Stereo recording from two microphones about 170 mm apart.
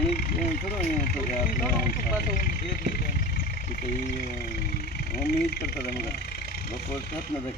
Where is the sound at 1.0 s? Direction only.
55° left (ahead or behind).